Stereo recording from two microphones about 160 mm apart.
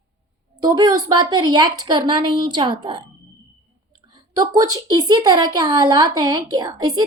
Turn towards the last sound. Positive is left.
turn(degrees=-25)  # may be behind; listen again after turning